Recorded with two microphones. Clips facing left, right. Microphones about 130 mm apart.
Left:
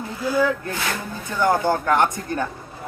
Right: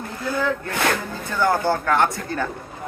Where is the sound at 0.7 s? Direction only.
65° right (ahead or behind).